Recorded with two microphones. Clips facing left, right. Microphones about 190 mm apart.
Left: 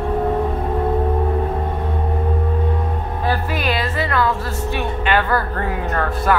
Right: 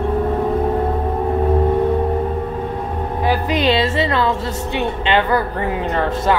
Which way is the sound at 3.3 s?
20° right (ahead or behind).